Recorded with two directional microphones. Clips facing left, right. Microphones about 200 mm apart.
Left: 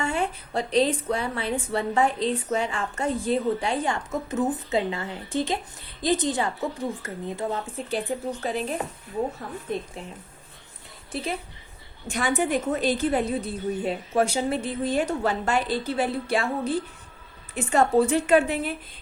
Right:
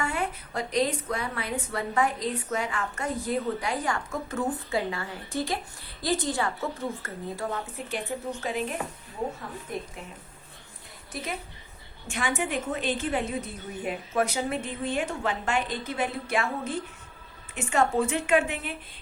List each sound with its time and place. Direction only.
0.0 s a woman's voice: 30° left (ahead or behind)
9.7 s a woman's voice: 25° left (ahead or behind)
11.1 s a woman's voice: 30° left (ahead or behind)